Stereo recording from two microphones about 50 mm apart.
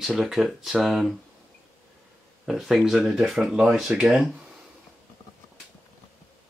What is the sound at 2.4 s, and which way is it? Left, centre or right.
Speech, centre.